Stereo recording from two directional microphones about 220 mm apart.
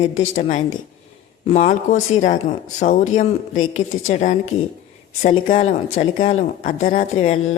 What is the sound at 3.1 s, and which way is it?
Speech, 35° left (ahead or behind).